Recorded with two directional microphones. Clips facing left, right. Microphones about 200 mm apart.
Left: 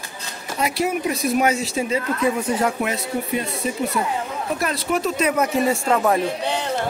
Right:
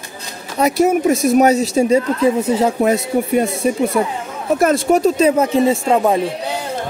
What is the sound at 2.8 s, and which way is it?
Speech, 45° right (ahead or behind).